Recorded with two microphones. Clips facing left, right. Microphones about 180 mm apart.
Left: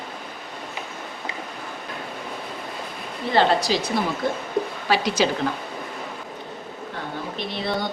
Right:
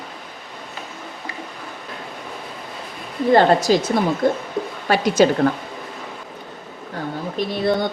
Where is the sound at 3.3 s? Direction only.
50° right (ahead or behind).